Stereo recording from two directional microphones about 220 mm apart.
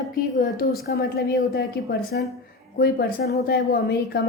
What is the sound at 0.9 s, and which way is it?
A woman's voice, 45° left (ahead or behind).